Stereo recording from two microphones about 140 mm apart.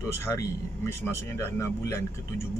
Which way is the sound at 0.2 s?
20° left (ahead or behind).